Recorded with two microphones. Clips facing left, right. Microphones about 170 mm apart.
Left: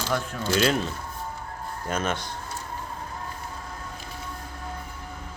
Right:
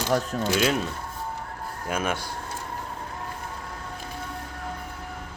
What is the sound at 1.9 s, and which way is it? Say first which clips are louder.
Speech: even; 10° right (ahead or behind).